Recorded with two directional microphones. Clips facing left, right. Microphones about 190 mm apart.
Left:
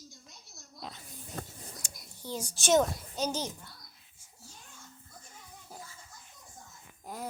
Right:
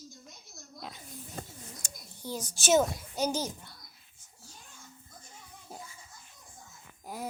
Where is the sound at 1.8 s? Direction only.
45° right (ahead or behind).